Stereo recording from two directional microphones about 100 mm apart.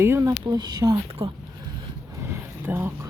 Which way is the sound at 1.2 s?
65° right (ahead or behind).